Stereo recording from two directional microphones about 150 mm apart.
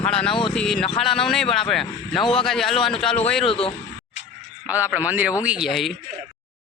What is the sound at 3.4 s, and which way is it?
Speech, 35° left (ahead or behind).